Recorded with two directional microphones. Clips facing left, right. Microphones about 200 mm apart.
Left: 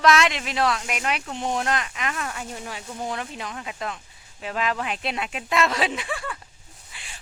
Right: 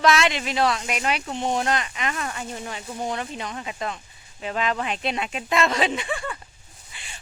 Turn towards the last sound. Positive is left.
turn(degrees=0)  # may be behind; listen again after turning